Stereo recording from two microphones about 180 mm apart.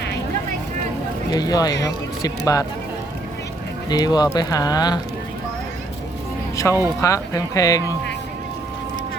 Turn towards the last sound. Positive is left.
turn(degrees=20)  # may be behind; listen again after turning